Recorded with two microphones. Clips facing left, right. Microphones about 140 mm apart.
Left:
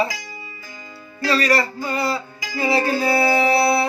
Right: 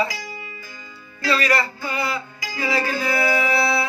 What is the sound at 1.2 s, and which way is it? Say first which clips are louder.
Music: left 2 dB; 35° left (ahead or behind).